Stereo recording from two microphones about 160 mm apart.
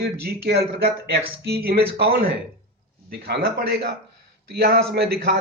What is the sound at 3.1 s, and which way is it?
A man's voice, 85° right.